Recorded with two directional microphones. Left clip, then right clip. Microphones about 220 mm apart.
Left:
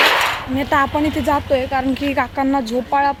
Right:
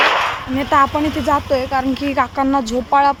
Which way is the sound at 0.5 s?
5° right (ahead or behind).